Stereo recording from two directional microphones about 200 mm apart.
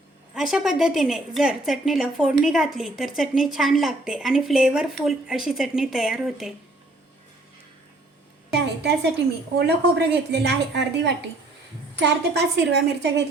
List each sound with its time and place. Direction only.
0.3 s a woman's voice: centre (ahead or behind)
8.5 s a sound: 55° right (ahead or behind)
9.6 s a woman's voice: 55° right (ahead or behind)